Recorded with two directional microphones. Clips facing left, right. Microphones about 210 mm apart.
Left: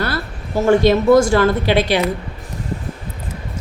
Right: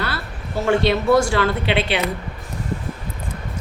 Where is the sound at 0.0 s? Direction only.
45° left (ahead or behind).